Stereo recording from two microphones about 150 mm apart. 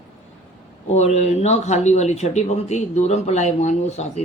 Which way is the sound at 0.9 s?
45° left (ahead or behind).